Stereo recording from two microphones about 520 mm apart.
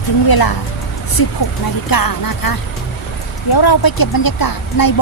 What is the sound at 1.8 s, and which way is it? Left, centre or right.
Speech, left.